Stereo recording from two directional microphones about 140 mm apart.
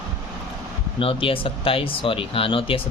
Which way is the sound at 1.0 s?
40° left (ahead or behind).